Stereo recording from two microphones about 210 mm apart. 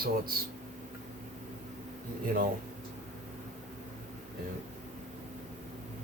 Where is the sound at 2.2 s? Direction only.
45° right (ahead or behind).